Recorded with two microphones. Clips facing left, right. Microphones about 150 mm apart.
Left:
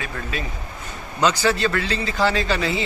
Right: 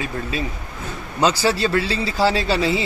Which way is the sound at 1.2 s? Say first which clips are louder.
Right 1 dB; 35° right (ahead or behind).